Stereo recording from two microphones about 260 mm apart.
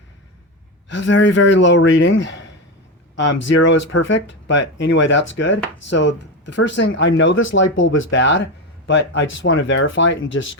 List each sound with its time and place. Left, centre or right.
0.9 s speech: left